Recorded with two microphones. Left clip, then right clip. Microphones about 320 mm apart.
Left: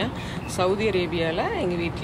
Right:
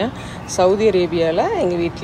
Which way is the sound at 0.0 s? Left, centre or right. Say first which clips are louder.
Right 5 dB; right.